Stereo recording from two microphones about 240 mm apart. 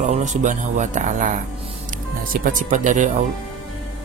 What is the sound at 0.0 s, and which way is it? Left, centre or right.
Speech, right.